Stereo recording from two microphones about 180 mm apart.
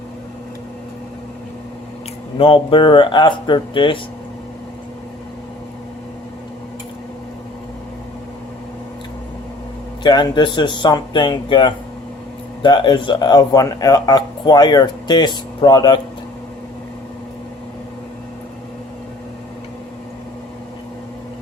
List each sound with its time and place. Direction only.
2.4 s speech: 30° left (ahead or behind)
10.0 s speech: 25° left (ahead or behind)